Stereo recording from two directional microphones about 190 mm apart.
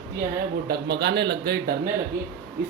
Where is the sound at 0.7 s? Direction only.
60° right (ahead or behind).